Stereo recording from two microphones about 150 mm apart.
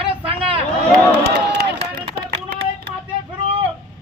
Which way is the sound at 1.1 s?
90° right.